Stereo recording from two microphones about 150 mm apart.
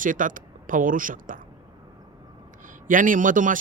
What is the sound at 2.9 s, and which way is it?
Speech, 60° right (ahead or behind).